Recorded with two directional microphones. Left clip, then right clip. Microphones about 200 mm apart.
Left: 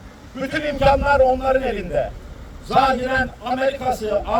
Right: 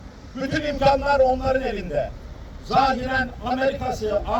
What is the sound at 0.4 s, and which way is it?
A man's voice, 5° right (ahead or behind).